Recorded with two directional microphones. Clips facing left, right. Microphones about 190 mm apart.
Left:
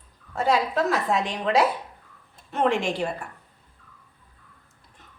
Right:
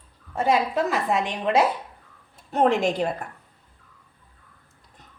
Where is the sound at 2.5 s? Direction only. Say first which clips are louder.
Right 3 dB; 40° right (ahead or behind).